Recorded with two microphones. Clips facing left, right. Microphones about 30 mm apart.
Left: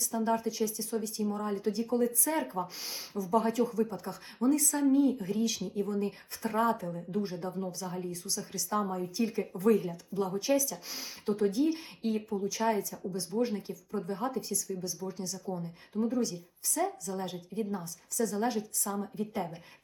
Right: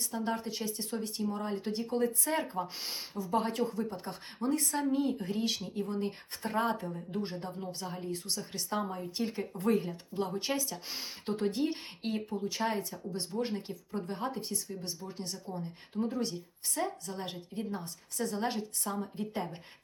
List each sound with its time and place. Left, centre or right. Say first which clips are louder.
0.0 s speech: left 4 dB; right